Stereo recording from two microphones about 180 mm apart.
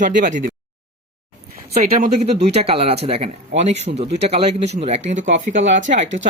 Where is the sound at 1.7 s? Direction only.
40° right (ahead or behind).